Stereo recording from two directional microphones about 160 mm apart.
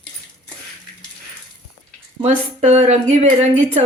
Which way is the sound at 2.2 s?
45° right (ahead or behind).